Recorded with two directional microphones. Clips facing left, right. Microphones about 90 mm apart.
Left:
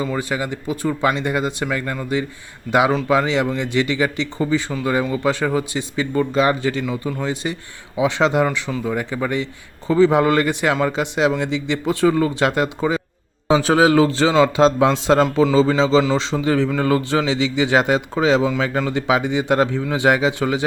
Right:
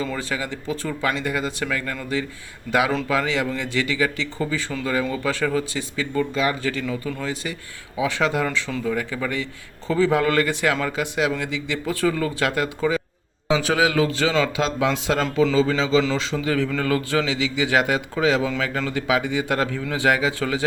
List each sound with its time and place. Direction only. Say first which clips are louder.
0.0 s a man's voice: left 4 dB; 15° left (ahead or behind)
13.5 s a man's voice: left 6 dB; 35° left (ahead or behind)